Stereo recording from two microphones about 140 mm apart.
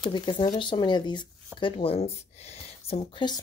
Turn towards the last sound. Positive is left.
turn(degrees=35)  # may be behind; listen again after turning